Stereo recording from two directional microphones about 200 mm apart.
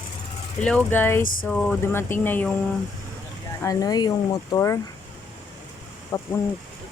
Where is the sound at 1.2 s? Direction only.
45° left (ahead or behind).